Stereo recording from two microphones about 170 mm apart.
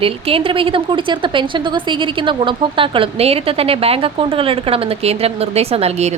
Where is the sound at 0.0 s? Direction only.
35° right (ahead or behind).